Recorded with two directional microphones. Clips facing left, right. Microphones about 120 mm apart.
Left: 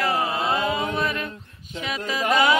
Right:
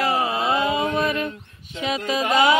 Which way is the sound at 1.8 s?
20° right (ahead or behind).